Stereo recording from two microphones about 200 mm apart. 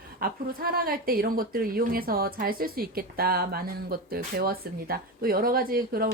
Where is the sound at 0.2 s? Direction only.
45° right (ahead or behind).